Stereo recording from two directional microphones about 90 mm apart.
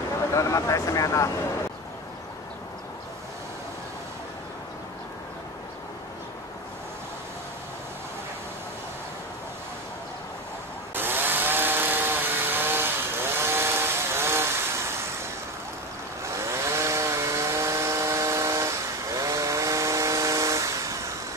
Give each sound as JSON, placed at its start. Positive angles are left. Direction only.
{"t": 0.3, "sound": "speech", "side_deg": 35}
{"t": 11.0, "sound": "chainsaw", "side_deg": -25}
{"t": 16.3, "sound": "chainsaw", "side_deg": -30}